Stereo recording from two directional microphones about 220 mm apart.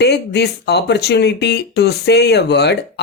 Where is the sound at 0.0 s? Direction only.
50° left (ahead or behind).